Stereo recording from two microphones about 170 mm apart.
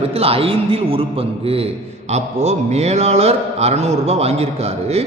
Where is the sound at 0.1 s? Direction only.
35° right (ahead or behind).